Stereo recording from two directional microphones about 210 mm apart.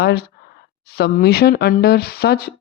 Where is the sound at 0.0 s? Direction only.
50° left (ahead or behind).